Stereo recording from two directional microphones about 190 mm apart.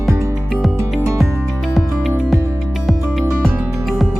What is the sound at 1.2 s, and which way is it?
Music, centre (ahead or behind).